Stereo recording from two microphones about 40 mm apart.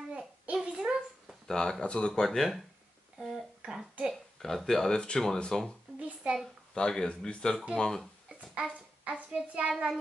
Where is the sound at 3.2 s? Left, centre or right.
Centre.